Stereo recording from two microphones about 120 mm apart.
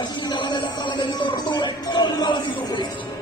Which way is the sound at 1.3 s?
40° left (ahead or behind).